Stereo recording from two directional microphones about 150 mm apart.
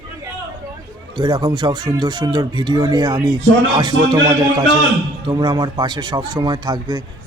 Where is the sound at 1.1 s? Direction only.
30° right (ahead or behind).